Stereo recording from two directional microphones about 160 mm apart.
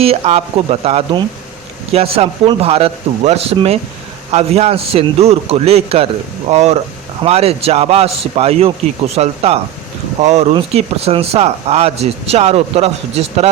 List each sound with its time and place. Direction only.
0.0 s speech: 40° right (ahead or behind)